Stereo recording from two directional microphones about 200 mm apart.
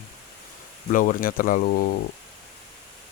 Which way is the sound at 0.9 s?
45° left (ahead or behind).